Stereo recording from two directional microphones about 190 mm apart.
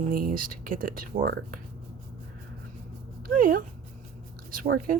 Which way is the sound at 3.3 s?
45° right (ahead or behind).